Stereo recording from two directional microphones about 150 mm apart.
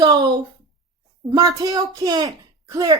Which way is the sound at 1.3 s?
25° right (ahead or behind).